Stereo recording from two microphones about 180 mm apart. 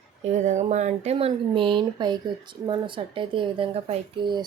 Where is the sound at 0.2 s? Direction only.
40° right (ahead or behind).